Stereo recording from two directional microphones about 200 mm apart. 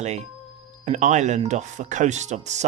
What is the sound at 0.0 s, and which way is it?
Speech, 35° right (ahead or behind).